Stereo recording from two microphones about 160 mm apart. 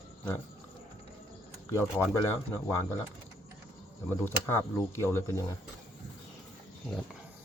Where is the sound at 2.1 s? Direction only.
15° left (ahead or behind).